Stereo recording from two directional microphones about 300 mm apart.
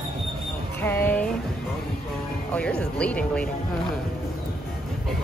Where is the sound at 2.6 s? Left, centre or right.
Centre.